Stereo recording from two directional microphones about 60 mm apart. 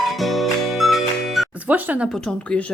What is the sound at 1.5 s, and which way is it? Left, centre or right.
Speech, right.